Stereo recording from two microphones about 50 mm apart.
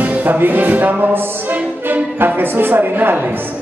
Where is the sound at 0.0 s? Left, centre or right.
Right.